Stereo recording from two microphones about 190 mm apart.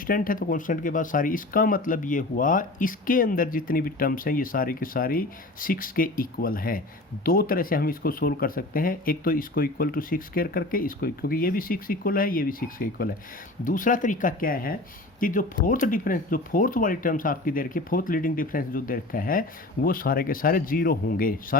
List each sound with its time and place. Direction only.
0.1 s speech: 45° left (ahead or behind)